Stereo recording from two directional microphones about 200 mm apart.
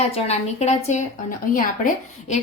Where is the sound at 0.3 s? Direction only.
30° left (ahead or behind).